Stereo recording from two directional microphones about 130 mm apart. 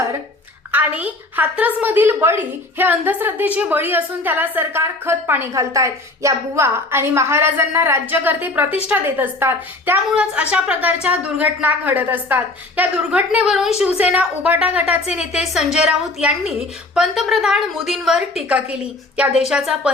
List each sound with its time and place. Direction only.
0.7 s a woman's voice: 15° right (ahead or behind)